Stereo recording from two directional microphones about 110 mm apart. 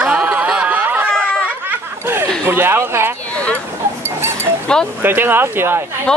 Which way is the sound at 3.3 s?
10° left (ahead or behind).